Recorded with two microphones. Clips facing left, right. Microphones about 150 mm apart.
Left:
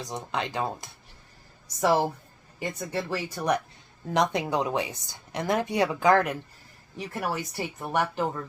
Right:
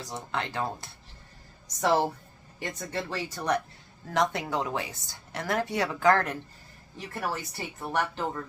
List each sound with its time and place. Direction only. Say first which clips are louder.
0.0 s speech: left 2 dB; 20° left (ahead or behind)